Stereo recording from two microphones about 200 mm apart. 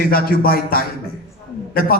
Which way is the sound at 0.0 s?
50° left (ahead or behind).